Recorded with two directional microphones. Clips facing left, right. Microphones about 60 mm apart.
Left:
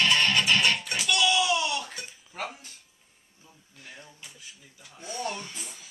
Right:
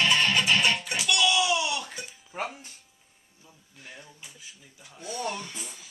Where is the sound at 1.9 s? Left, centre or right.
Centre.